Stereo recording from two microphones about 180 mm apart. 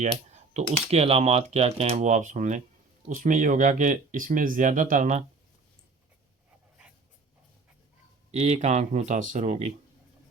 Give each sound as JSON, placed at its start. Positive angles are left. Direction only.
{"t": 0.0, "sound": "speech", "side_deg": -40}
{"t": 8.3, "sound": "speech", "side_deg": -40}